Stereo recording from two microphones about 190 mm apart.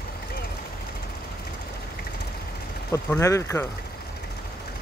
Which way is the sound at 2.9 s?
15° left (ahead or behind).